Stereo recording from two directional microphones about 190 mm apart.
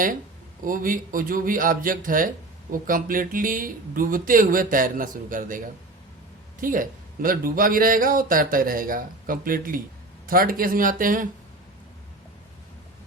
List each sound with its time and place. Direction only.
0.6 s a man's voice: 45° right (ahead or behind)